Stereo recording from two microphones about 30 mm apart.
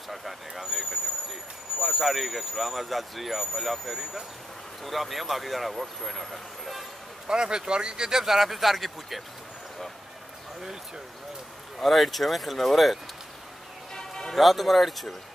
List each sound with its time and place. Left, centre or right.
0.1 s speech: centre
7.2 s speech: right
8.2 s speech: centre
11.8 s speech: centre
13.9 s music: centre
14.3 s speech: centre